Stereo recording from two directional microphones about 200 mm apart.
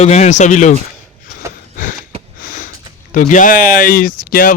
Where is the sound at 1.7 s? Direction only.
40° left (ahead or behind).